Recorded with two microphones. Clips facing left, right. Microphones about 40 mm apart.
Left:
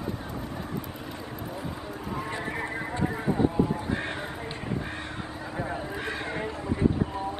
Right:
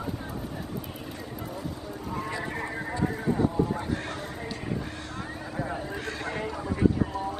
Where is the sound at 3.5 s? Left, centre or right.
Centre.